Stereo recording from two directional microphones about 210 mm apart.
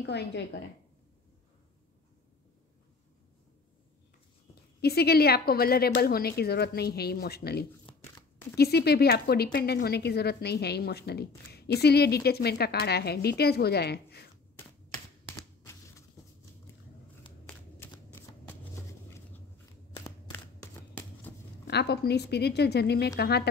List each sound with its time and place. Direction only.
0.0 s a woman's voice: 55° left (ahead or behind)
4.8 s a woman's voice: 50° left (ahead or behind)
15.2 s a sound: 10° left (ahead or behind)
16.7 s biting: 15° left (ahead or behind)
17.5 s shuffling cards: 10° left (ahead or behind)
21.6 s a woman's voice: 50° left (ahead or behind)